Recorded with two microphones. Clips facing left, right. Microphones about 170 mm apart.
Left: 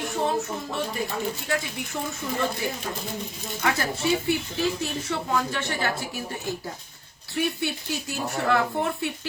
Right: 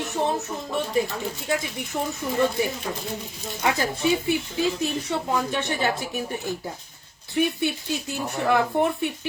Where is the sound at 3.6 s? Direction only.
15° right (ahead or behind).